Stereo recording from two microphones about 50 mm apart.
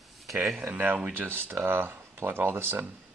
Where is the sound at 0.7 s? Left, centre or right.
Right.